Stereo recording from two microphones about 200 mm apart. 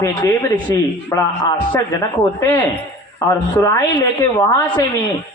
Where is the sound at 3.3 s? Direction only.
15° left (ahead or behind).